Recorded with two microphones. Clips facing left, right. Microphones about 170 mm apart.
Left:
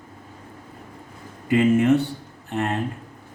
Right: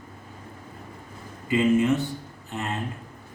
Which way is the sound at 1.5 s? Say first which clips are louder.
Left 3 dB; 60° left (ahead or behind).